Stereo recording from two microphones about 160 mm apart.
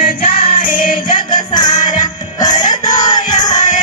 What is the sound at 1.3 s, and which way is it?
Music, 25° left (ahead or behind).